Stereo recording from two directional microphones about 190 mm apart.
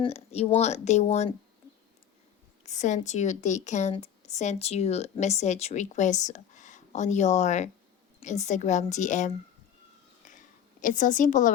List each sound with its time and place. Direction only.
0.0 s speech: 35° left (ahead or behind)
2.6 s speech: 40° left (ahead or behind)
10.2 s a sound: 40° left (ahead or behind)